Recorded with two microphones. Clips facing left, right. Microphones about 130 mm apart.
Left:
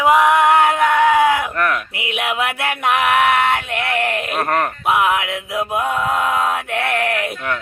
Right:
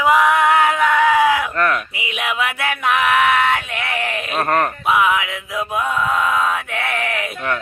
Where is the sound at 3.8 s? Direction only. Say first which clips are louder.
Left 6 dB; 60° left (ahead or behind).